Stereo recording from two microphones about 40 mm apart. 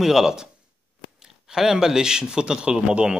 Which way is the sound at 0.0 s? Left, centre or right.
Centre.